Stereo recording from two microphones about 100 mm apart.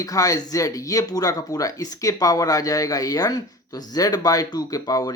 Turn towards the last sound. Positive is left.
turn(degrees=35)  # may be behind; listen again after turning